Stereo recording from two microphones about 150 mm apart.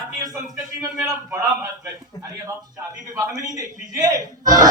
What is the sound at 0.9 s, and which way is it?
Speech, 5° right (ahead or behind).